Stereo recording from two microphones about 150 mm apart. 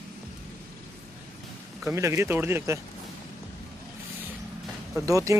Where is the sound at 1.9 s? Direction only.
20° right (ahead or behind).